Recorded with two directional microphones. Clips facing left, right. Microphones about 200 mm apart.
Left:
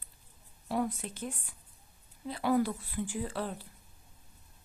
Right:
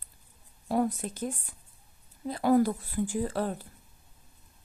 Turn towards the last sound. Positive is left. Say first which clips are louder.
# right 5 dB
turn(degrees=-45)  # may be behind; listen again after turning